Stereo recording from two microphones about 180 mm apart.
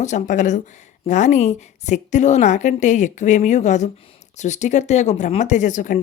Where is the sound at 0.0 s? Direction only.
40° left (ahead or behind).